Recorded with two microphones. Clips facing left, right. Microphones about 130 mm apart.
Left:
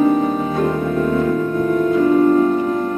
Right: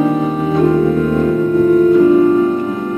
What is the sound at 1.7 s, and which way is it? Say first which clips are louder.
Music: right 4 dB; 15° right (ahead or behind).